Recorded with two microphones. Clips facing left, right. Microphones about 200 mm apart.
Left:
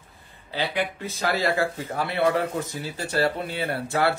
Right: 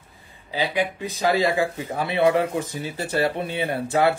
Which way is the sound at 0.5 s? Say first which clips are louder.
Right 3 dB; 15° right (ahead or behind).